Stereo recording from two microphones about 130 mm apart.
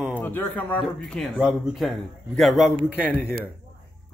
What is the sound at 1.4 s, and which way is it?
A man's voice, 5° right (ahead or behind).